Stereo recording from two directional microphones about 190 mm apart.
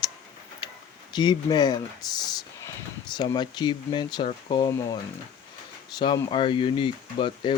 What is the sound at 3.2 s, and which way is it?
Speech, 20° left (ahead or behind).